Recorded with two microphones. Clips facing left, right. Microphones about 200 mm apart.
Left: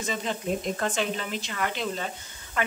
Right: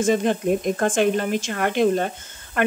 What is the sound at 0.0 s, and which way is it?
Speech, 55° right (ahead or behind).